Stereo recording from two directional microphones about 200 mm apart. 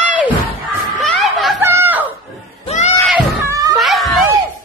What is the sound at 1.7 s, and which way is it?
Chicken, 10° right (ahead or behind).